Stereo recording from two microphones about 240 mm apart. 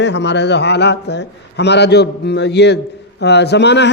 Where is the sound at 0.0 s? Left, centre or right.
Left.